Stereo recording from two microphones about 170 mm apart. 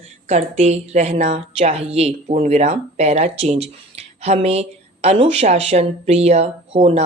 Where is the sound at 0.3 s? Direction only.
40° right (ahead or behind).